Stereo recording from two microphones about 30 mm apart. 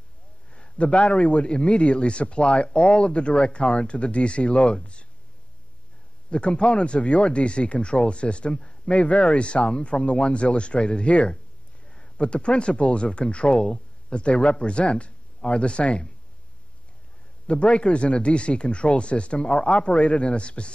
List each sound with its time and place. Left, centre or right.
0.5 s a sound: left
0.9 s a man's voice: left
6.3 s a man's voice: left
8.5 s a man's voice: left
8.8 s a man's voice: left
17.5 s a man's voice: left